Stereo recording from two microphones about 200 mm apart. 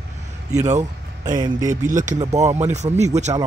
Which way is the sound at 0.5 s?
35° right (ahead or behind).